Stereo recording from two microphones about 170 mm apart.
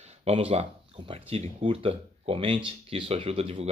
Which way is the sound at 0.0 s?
40° right (ahead or behind).